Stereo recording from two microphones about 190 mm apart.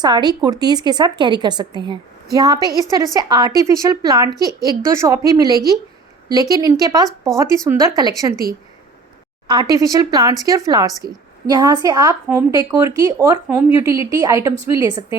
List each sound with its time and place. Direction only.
0.0 s a woman's voice: 20° right (ahead or behind)
9.5 s a woman's voice: 20° right (ahead or behind)